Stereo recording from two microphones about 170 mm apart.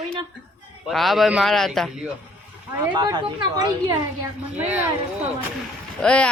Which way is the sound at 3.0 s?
25° right (ahead or behind).